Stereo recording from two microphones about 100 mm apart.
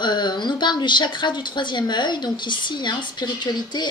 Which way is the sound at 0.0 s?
50° left (ahead or behind).